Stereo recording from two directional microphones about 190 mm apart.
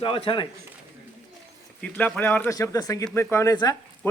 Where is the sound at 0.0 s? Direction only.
30° left (ahead or behind).